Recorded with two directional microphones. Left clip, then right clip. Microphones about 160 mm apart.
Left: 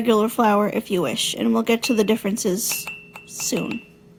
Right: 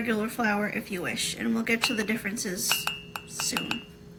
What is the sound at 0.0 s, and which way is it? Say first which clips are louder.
Speech: left 10 dB; 40° left (ahead or behind).